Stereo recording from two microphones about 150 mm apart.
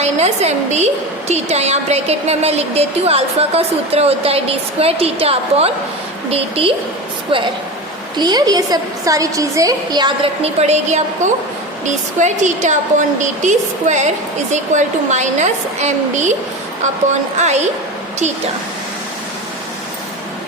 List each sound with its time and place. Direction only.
0.0 s a woman's voice: 45° right (ahead or behind)
8.1 s a woman's voice: 25° right (ahead or behind)
10.4 s a woman's voice: 45° right (ahead or behind)
17.3 s a woman's voice: 50° right (ahead or behind)